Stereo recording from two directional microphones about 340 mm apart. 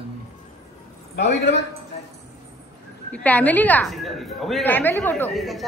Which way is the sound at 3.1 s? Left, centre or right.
Centre.